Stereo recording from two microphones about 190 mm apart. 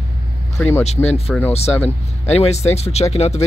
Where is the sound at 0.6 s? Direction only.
10° left (ahead or behind).